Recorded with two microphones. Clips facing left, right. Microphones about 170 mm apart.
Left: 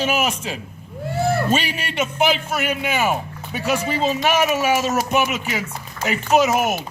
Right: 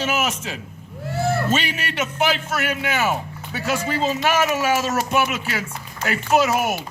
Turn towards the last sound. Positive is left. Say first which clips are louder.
# left 2 dB
turn(degrees=20)  # may be behind; listen again after turning